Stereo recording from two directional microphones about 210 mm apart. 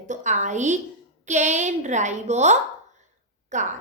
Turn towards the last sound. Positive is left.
turn(degrees=-35)  # may be behind; listen again after turning